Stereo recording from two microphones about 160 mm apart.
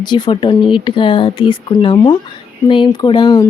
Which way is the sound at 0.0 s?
30° left (ahead or behind).